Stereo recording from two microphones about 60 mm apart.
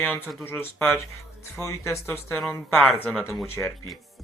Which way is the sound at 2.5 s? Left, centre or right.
Left.